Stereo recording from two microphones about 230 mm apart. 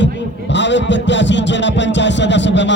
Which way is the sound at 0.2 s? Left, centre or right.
Left.